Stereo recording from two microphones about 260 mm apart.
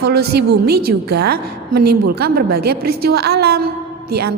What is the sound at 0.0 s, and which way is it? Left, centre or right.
A woman's voice, right.